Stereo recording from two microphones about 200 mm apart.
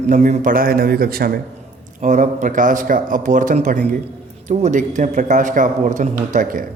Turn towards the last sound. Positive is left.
turn(degrees=-40)  # may be behind; listen again after turning